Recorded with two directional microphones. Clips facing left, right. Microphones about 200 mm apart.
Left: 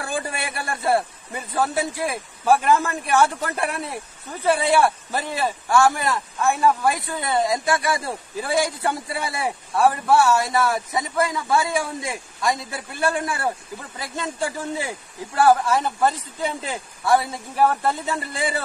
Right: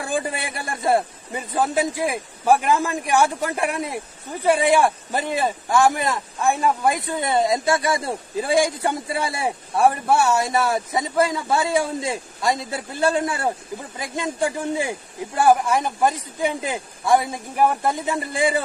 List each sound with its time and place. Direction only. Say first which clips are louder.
0.0 s a man's voice: right 3 dB; 20° right (ahead or behind)